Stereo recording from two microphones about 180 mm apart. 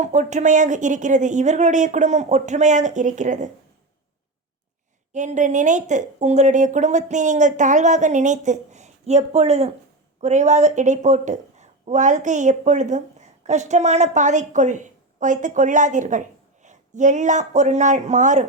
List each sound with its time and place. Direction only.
0.0 s a woman's voice: 40° right (ahead or behind)
5.1 s a woman's voice: 40° right (ahead or behind)